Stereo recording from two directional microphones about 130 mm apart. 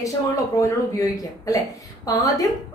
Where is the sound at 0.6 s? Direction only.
25° left (ahead or behind).